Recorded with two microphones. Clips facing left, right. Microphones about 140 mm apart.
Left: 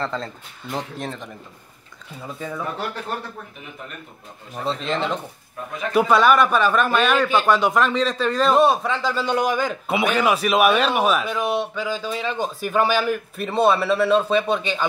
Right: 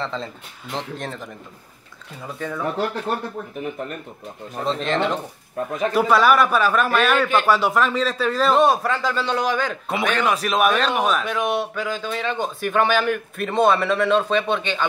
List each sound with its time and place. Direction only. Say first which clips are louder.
0.0 s a man's voice: left 1 dB; centre (ahead or behind)
2.3 s a man's voice: right 2 dB; 10° left (ahead or behind)
4.6 s a man's voice: right 2 dB; centre (ahead or behind)
5.7 s speech: right 5 dB; 35° right (ahead or behind)
5.9 s a man's voice: left 1 dB; centre (ahead or behind)
9.1 s a man's voice: left 1 dB; 10° left (ahead or behind)